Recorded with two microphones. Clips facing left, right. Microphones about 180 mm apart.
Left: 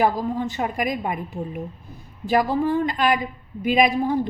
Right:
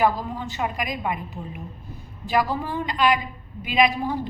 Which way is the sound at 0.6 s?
45° left (ahead or behind).